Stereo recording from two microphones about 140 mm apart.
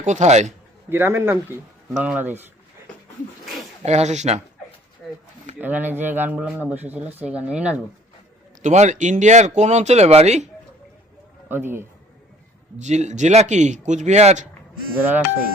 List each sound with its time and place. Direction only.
0.0 s a man's voice: 55° right (ahead or behind)
0.9 s speech: 15° right (ahead or behind)
3.4 s a sound: centre (ahead or behind)
3.8 s speech: 55° right (ahead or behind)
5.0 s a sound: centre (ahead or behind)
5.5 s speech: 10° right (ahead or behind)
8.6 s a man's voice: 55° right (ahead or behind)
11.4 s a man's voice: 15° right (ahead or behind)
12.8 s a man's voice: 55° right (ahead or behind)
14.9 s speech: 10° right (ahead or behind)